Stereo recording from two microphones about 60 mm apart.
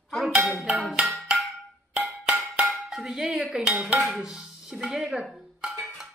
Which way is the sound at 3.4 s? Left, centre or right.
Centre.